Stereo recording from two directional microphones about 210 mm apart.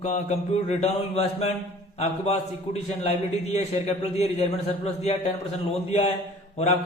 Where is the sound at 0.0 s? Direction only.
30° left (ahead or behind).